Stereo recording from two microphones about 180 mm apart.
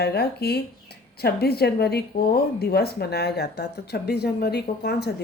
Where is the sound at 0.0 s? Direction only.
60° left (ahead or behind).